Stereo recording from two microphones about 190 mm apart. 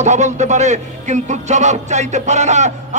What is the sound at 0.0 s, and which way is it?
A man's voice, 40° right (ahead or behind).